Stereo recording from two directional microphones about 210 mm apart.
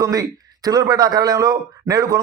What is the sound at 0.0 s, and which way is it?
Speech, 15° right (ahead or behind).